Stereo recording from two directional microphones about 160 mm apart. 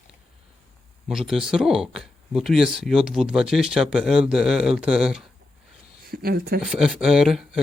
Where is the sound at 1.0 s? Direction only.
Centre (ahead or behind).